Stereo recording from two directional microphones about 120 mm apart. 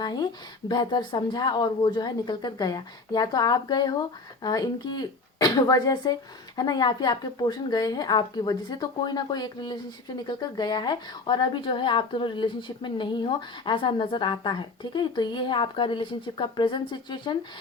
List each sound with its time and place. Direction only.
0.0 s a woman's voice: 35° left (ahead or behind)